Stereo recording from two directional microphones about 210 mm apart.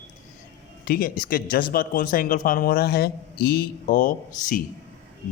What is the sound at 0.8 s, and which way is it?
A man's voice, 45° left (ahead or behind).